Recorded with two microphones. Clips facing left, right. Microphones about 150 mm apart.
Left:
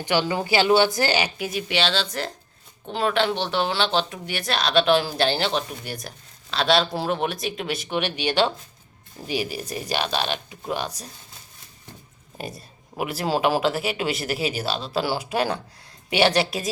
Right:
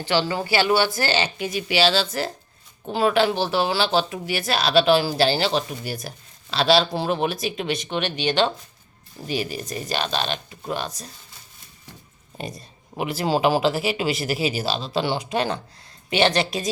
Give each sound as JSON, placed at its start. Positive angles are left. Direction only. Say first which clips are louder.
{"t": 0.0, "sound": "speech", "louder": "even", "side_deg": 15}
{"t": 1.5, "sound": "speech", "louder": "right 4 dB", "side_deg": 0}
{"t": 12.4, "sound": "speech", "louder": "right 1 dB", "side_deg": 5}